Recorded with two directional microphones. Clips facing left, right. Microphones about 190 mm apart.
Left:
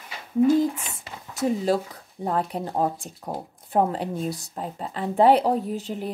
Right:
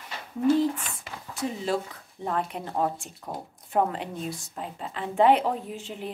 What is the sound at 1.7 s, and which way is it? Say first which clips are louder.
A woman's voice: left 5 dB; 40° left (ahead or behind).